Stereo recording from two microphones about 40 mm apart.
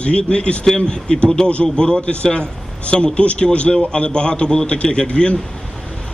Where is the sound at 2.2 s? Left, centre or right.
Left.